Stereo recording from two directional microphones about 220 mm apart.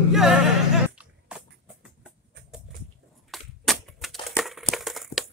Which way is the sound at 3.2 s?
Centre (ahead or behind).